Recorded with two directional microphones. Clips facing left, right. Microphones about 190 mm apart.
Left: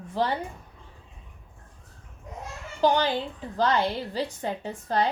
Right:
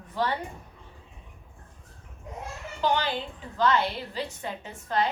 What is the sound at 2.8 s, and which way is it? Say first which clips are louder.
A woman's voice: left 4 dB; 40° left (ahead or behind).